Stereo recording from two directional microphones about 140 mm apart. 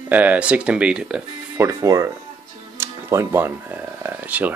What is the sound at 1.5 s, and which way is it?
Speech, 20° right (ahead or behind).